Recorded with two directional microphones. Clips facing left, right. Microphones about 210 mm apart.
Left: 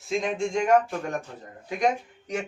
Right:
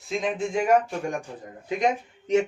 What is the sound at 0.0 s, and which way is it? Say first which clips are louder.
Speech: even; centre (ahead or behind).